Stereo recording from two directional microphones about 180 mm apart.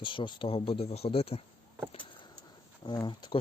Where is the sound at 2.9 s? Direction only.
25° left (ahead or behind).